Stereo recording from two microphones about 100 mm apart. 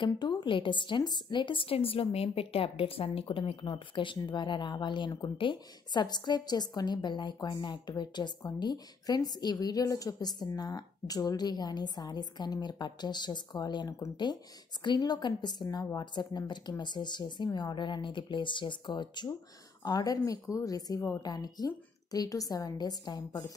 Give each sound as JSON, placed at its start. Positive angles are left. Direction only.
{"t": 0.0, "sound": "a woman's voice", "side_deg": 50}